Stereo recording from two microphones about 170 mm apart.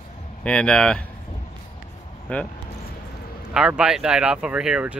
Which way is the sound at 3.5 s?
5° right (ahead or behind).